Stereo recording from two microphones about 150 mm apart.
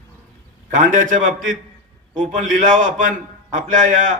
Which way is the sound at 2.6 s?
60° right (ahead or behind).